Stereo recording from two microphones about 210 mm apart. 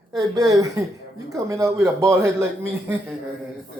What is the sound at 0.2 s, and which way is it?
Speech, 15° right (ahead or behind).